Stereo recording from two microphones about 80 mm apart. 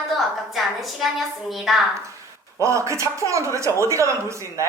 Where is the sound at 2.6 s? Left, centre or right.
Right.